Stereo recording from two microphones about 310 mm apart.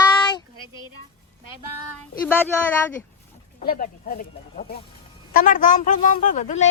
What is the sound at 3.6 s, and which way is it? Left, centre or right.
A woman's voice, left.